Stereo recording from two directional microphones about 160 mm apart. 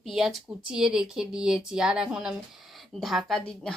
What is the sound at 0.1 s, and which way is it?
A woman's voice, centre (ahead or behind).